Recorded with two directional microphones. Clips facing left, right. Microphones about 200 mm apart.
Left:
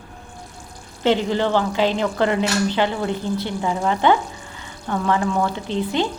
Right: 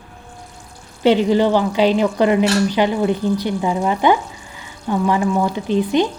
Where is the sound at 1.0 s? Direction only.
15° right (ahead or behind).